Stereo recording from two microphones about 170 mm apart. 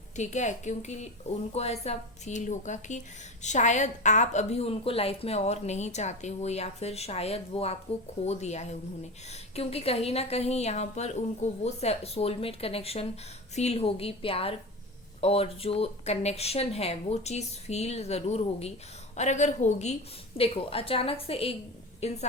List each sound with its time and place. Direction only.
0.2 s a woman's voice: 45° left (ahead or behind)